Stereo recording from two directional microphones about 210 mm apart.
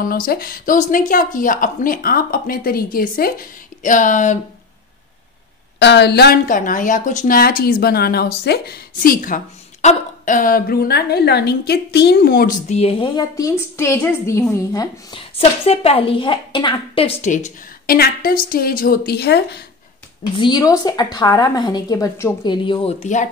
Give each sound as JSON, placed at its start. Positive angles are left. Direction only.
{"t": 0.0, "sound": "a woman's voice", "side_deg": 45}
{"t": 5.8, "sound": "a woman's voice", "side_deg": 55}
{"t": 20.3, "sound": "a woman's voice", "side_deg": 20}